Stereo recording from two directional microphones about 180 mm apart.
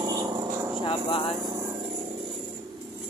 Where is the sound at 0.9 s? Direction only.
30° left (ahead or behind).